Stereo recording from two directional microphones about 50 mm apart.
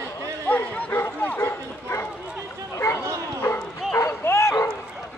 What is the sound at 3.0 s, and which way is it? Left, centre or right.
Bow-wow, right.